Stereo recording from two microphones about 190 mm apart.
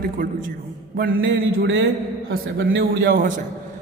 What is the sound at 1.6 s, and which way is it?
A man's voice, 75° right (ahead or behind).